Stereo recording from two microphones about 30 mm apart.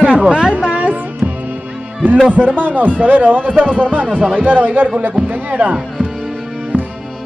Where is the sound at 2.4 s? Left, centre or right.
Right.